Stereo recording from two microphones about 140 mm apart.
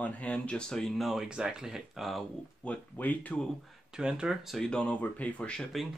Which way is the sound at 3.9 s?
5° right (ahead or behind).